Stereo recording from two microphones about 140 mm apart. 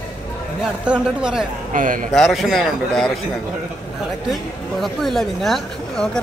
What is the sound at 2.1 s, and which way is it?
Speech, centre (ahead or behind).